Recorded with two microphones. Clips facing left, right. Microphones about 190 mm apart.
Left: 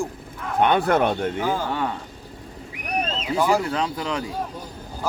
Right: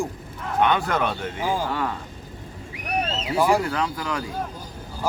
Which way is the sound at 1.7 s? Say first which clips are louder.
Left 1 dB; 25° left (ahead or behind).